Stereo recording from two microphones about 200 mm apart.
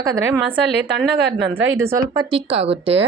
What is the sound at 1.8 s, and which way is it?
Speech, 15° right (ahead or behind).